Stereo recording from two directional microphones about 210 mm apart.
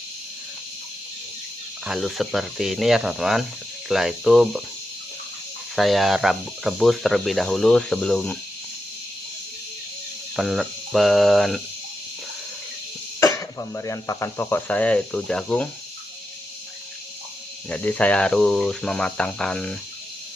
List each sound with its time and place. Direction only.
1.8 s speech: centre (ahead or behind)
5.7 s speech: centre (ahead or behind)
10.3 s speech: centre (ahead or behind)
13.1 s speech: 15° left (ahead or behind)
17.7 s speech: 5° left (ahead or behind)